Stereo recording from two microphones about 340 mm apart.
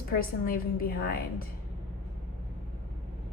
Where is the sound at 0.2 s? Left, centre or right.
Left.